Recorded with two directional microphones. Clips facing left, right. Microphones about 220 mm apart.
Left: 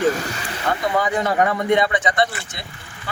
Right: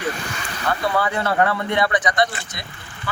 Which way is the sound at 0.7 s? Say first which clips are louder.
Left 1 dB; 15° left (ahead or behind).